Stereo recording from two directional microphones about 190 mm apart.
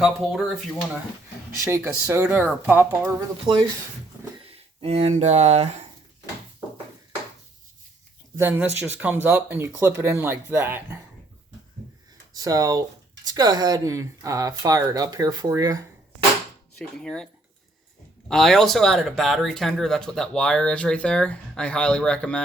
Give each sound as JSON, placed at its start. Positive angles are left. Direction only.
{"t": 0.0, "sound": "speech", "side_deg": 0}
{"t": 1.5, "sound": "speech", "side_deg": -15}
{"t": 8.4, "sound": "speech", "side_deg": -10}
{"t": 12.3, "sound": "speech", "side_deg": -20}
{"t": 16.7, "sound": "speech", "side_deg": 5}
{"t": 18.3, "sound": "speech", "side_deg": 0}